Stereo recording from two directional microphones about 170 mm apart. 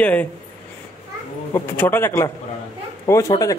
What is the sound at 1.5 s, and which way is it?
Speech, 15° left (ahead or behind).